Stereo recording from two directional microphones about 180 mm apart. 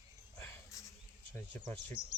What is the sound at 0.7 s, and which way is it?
Insect, 15° left (ahead or behind).